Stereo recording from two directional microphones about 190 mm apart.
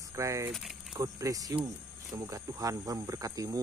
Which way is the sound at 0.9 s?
20° right (ahead or behind).